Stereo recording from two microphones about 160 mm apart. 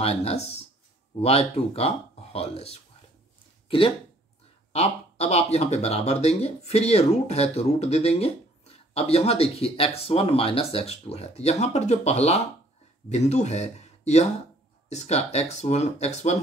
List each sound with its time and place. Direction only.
0.0 s speech: 40° left (ahead or behind)